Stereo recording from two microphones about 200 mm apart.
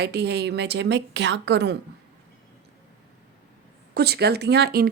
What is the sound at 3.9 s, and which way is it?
A woman's voice, 50° right (ahead or behind).